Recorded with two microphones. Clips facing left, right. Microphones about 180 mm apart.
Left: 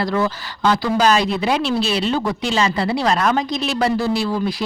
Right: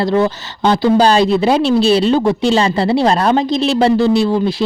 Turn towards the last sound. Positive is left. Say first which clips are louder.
# right 7 dB
turn(degrees=-25)  # may be behind; listen again after turning